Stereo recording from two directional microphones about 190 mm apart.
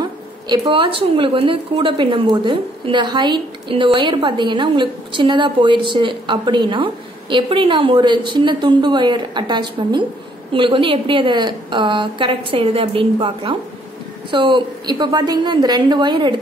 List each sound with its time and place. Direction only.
0.5 s a woman's voice: 25° right (ahead or behind)